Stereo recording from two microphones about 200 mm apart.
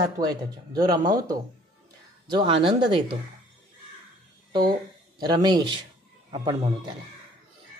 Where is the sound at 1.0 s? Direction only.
40° right (ahead or behind).